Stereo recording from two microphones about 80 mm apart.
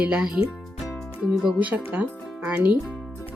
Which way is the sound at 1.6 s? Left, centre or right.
Centre.